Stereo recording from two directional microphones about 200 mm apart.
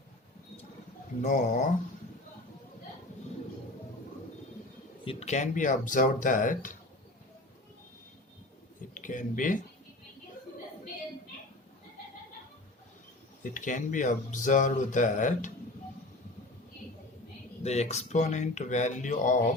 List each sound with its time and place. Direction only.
1.2 s speech: 40° left (ahead or behind)
5.0 s speech: 35° left (ahead or behind)
9.0 s speech: 40° left (ahead or behind)
13.4 s speech: 40° left (ahead or behind)
17.6 s speech: 35° left (ahead or behind)